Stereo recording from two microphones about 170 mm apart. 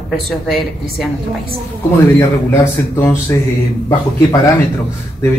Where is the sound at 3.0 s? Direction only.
15° left (ahead or behind).